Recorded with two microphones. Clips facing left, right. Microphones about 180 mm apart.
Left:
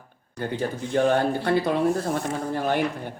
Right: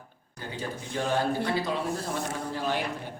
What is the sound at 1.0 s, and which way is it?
Speech, 60° left (ahead or behind).